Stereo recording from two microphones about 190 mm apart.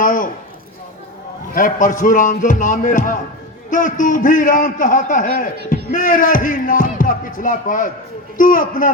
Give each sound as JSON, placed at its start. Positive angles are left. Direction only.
{"t": 0.0, "sound": "speech", "side_deg": 45}
{"t": 1.5, "sound": "speech", "side_deg": 45}